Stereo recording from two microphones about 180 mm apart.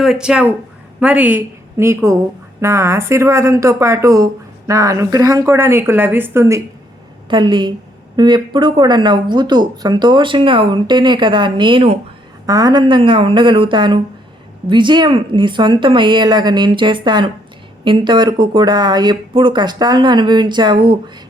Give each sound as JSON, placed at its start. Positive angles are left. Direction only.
{"t": 0.0, "sound": "a woman's voice", "side_deg": -5}
{"t": 7.3, "sound": "speech", "side_deg": -25}